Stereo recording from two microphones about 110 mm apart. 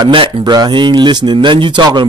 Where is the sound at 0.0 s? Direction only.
45° right (ahead or behind).